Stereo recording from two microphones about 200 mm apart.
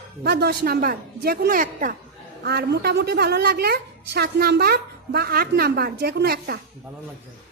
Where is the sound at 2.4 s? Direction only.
55° right (ahead or behind).